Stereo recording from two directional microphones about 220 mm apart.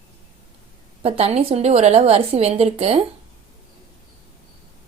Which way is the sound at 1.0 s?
25° right (ahead or behind).